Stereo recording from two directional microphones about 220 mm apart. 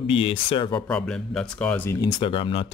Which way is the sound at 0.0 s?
25° left (ahead or behind).